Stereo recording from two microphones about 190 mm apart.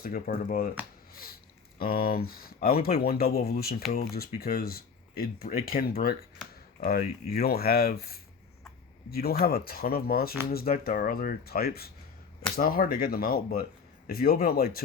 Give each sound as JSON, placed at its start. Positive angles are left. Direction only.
{"t": 0.0, "sound": "speech", "side_deg": 50}
{"t": 1.1, "sound": "a sound", "side_deg": 50}
{"t": 1.8, "sound": "speech", "side_deg": 50}